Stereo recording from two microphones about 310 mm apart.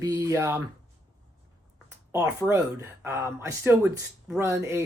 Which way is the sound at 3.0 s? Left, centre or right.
Centre.